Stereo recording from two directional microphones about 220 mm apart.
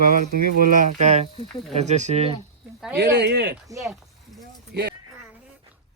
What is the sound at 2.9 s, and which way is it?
Speech, 50° right (ahead or behind).